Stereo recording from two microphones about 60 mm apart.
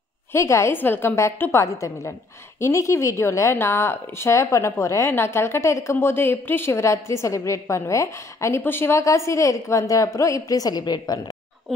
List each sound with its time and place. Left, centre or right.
0.3 s a woman's voice: left
0.7 s a woman's voice: left
1.5 s a woman's voice: left
5.1 s a woman's voice: left
8.6 s a woman's voice: left
9.0 s a woman's voice: left